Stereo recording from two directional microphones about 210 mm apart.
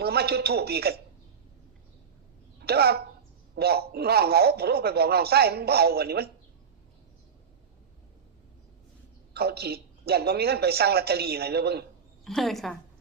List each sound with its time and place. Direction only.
0.0 s a man's voice: 50° right (ahead or behind)
2.6 s a man's voice: 50° right (ahead or behind)
9.3 s a man's voice: 50° right (ahead or behind)
12.2 s a woman's voice: centre (ahead or behind)